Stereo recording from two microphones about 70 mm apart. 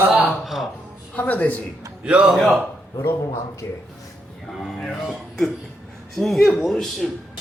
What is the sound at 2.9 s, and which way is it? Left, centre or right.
Speech, left.